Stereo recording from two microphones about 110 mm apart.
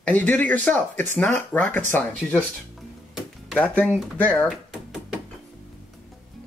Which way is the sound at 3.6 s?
15° left (ahead or behind).